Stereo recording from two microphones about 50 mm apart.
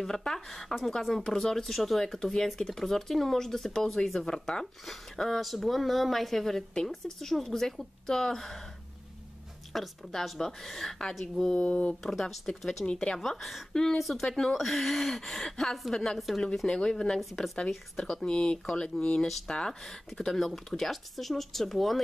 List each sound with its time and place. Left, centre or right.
0.0 s speech: centre
9.7 s speech: centre
11.9 s speech: centre
13.2 s speech: centre
16.6 s speech: centre
17.2 s speech: centre
18.2 s speech: centre
19.8 s speech: centre